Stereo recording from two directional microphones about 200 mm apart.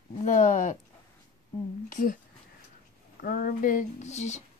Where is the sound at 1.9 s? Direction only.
40° left (ahead or behind).